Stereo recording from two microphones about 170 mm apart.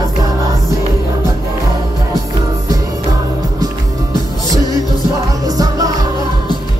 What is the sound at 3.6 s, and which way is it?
Music, 20° right (ahead or behind).